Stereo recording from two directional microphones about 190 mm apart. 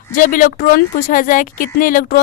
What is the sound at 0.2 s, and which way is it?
Speech, 45° left (ahead or behind).